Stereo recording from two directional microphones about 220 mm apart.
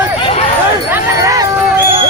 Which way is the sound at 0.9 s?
15° right (ahead or behind).